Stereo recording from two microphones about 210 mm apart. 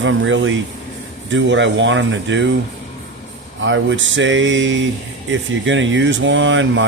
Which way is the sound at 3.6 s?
60° right (ahead or behind).